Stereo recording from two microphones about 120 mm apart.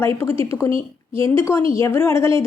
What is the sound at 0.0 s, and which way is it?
A woman's voice, 20° left (ahead or behind).